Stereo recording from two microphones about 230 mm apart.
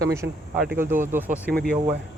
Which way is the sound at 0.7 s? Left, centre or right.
Centre.